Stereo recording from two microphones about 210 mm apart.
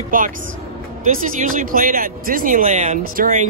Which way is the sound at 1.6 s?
40° right (ahead or behind).